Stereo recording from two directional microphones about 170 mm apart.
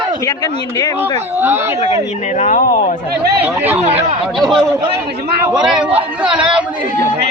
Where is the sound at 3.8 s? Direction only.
35° right (ahead or behind).